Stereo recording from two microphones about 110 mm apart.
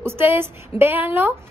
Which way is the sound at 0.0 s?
20° right (ahead or behind).